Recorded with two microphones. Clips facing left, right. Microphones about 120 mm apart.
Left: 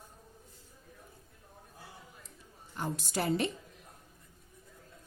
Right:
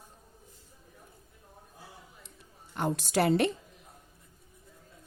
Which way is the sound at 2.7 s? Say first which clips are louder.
Right 7 dB; 70° right (ahead or behind).